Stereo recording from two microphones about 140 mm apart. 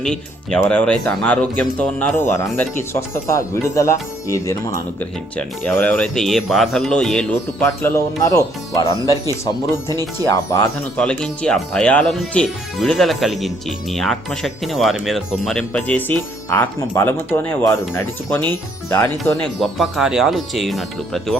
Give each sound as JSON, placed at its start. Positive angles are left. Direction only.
{"t": 0.0, "sound": "speech", "side_deg": 5}
{"t": 7.6, "sound": "speech", "side_deg": 15}
{"t": 10.0, "sound": "speech", "side_deg": 20}
{"t": 10.9, "sound": "speech", "side_deg": 5}
{"t": 19.5, "sound": "speech", "side_deg": 0}